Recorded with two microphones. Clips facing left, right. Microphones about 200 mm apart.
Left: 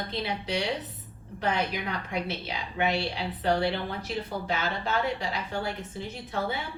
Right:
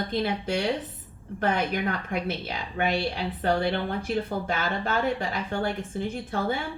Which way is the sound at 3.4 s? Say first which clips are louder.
Right 1 dB; 50° right (ahead or behind).